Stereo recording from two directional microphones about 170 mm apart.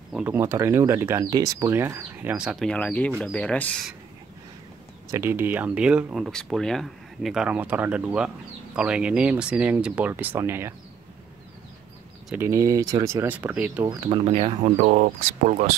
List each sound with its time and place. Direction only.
0.1 s speech: 10° right (ahead or behind)
2.3 s speech: 5° right (ahead or behind)
5.1 s speech: 15° right (ahead or behind)
12.4 s speech: 15° right (ahead or behind)
13.9 s speech: 25° right (ahead or behind)
14.2 s speech: 35° right (ahead or behind)